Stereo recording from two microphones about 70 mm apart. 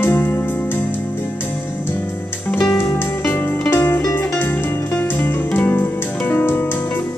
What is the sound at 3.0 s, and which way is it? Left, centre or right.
Music, left.